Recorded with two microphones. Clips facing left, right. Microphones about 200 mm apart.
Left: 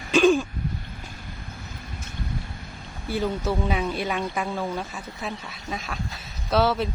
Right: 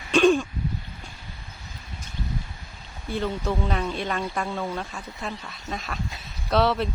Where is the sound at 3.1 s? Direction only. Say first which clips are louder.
Left 1 dB; 5° left (ahead or behind).